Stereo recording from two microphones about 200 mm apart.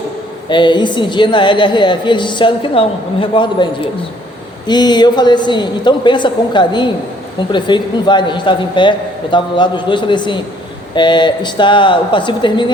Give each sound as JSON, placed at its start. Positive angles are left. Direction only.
{"t": 0.4, "sound": "a woman's voice", "side_deg": 25}